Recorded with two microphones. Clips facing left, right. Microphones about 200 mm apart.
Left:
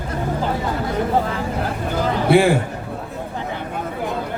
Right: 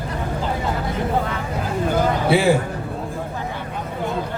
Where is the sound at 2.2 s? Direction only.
55° left (ahead or behind).